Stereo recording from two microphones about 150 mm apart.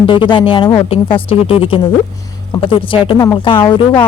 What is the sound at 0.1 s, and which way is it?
Speech, 35° left (ahead or behind).